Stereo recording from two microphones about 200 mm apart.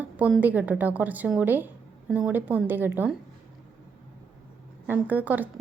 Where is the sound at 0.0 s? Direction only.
5° right (ahead or behind).